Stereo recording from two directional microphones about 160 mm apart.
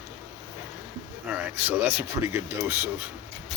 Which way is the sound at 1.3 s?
10° right (ahead or behind).